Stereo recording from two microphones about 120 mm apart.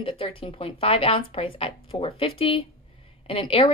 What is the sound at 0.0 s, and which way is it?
A woman's voice, 45° left (ahead or behind).